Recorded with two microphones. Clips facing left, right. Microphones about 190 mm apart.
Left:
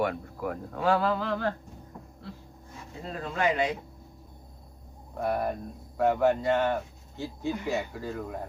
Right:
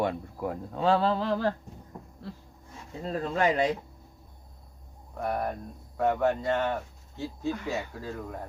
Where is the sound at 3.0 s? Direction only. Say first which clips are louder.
Right 2 dB; 40° right (ahead or behind).